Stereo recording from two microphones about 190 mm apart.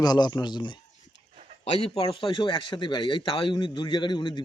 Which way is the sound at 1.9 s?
30° left (ahead or behind).